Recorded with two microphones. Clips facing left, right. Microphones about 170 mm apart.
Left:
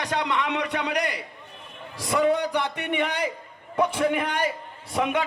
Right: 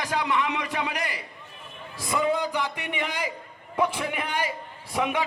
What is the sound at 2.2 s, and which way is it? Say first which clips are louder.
A man's voice: left 3 dB; 70° left (ahead or behind).